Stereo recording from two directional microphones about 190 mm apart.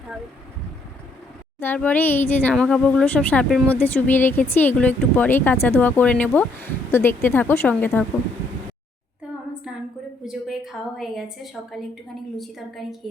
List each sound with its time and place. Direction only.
1.5 s speech: 10° left (ahead or behind)
10.2 s a sound: centre (ahead or behind)
12.4 s a woman's voice: centre (ahead or behind)